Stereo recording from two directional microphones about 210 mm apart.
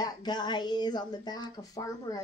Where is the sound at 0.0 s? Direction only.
20° left (ahead or behind).